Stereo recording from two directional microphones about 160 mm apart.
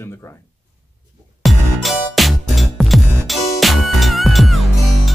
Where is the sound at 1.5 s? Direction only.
Centre (ahead or behind).